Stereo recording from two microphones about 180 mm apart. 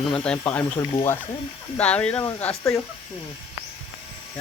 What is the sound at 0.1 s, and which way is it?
Speech, 5° left (ahead or behind).